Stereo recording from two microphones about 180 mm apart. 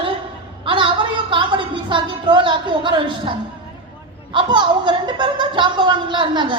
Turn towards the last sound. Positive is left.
turn(degrees=-25)  # may be behind; listen again after turning